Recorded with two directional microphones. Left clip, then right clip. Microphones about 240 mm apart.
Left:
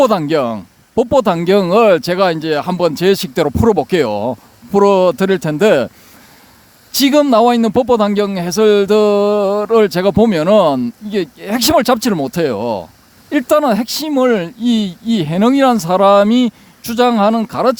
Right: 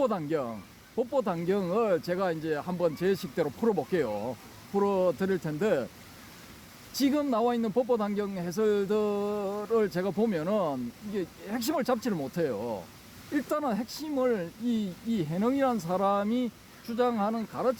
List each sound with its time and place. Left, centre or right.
0.0 s speech: left
6.9 s speech: left